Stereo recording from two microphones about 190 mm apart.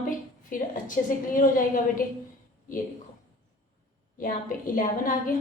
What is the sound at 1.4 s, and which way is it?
Speech, 45° left (ahead or behind).